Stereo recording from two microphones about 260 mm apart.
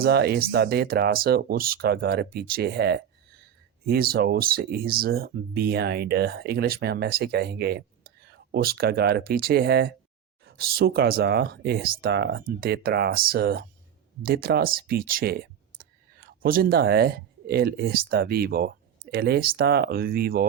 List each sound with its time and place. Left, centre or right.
0.0 s speech: right